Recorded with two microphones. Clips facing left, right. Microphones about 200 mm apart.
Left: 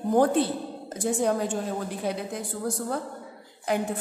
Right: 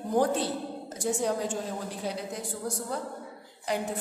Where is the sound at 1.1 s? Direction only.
55° left (ahead or behind).